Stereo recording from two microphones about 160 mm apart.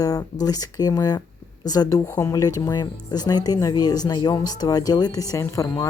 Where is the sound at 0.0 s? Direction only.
25° left (ahead or behind).